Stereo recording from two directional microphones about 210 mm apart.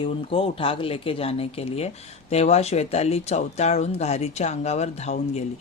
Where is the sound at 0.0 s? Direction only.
25° left (ahead or behind).